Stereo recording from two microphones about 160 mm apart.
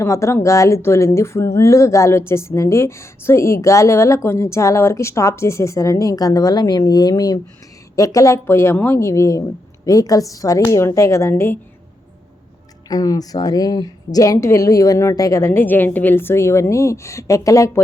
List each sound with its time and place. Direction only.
0.0 s a woman's voice: 20° left (ahead or behind)
12.9 s a woman's voice: 25° left (ahead or behind)